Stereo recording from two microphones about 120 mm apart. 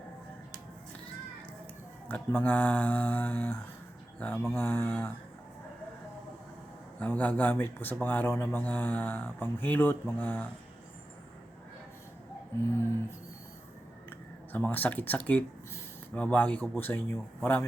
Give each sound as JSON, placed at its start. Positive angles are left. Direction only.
{"t": 2.0, "sound": "speech", "side_deg": 15}
{"t": 7.0, "sound": "speech", "side_deg": 15}
{"t": 14.5, "sound": "speech", "side_deg": 15}